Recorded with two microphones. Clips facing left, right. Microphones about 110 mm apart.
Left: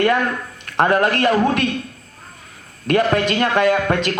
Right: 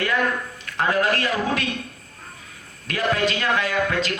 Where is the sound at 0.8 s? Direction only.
55° left (ahead or behind).